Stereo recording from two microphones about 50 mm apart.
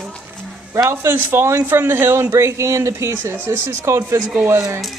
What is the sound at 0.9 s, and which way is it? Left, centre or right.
A man's voice, right.